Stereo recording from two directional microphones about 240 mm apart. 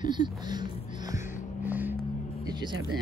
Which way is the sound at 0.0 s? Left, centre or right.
Centre.